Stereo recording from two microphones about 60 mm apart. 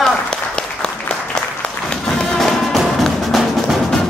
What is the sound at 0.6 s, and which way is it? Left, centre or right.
Applause, centre.